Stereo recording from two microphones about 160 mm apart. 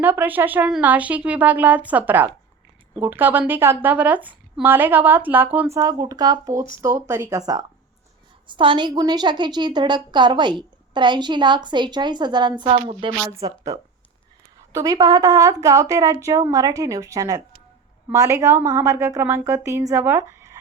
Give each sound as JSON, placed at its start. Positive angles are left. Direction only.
{"t": 0.0, "sound": "a woman's voice", "side_deg": -10}
{"t": 13.2, "sound": "a woman's voice", "side_deg": -20}
{"t": 20.1, "sound": "a sound", "side_deg": -15}